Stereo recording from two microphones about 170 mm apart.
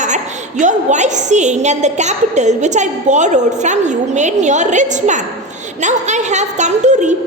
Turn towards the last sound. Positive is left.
turn(degrees=-45)  # may be behind; listen again after turning